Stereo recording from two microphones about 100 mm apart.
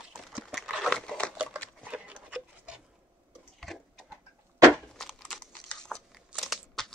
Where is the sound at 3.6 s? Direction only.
Centre (ahead or behind).